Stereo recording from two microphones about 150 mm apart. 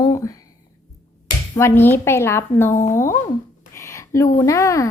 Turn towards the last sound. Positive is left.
turn(degrees=20)  # may be behind; listen again after turning